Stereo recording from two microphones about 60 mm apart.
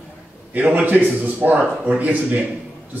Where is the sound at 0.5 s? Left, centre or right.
Right.